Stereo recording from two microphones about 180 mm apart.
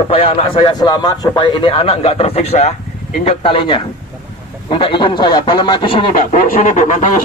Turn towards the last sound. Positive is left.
turn(degrees=45)  # may be behind; listen again after turning